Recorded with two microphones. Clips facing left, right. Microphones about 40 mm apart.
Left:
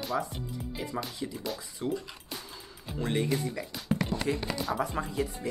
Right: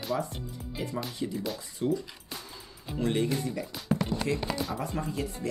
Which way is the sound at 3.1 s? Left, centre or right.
Centre.